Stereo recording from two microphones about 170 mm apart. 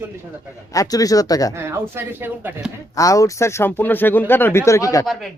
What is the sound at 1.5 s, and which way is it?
Speech, 15° right (ahead or behind).